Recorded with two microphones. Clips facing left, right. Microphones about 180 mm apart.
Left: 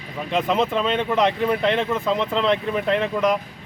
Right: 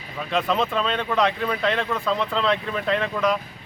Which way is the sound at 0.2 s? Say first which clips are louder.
Left 2 dB; 20° left (ahead or behind).